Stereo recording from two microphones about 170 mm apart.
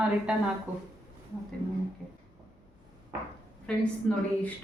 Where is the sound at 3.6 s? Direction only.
5° left (ahead or behind).